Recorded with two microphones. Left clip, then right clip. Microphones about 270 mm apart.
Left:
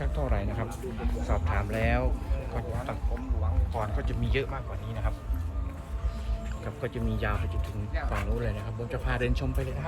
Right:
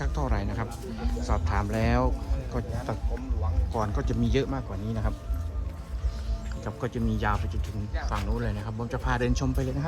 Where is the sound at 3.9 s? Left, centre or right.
Centre.